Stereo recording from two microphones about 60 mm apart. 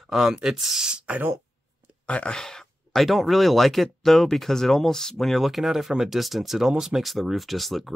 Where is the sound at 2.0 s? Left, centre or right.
Centre.